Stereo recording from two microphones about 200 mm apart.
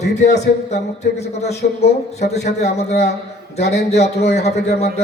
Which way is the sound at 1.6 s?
45° left (ahead or behind).